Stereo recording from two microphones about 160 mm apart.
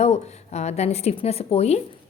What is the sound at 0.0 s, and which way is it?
A woman's voice, 40° left (ahead or behind).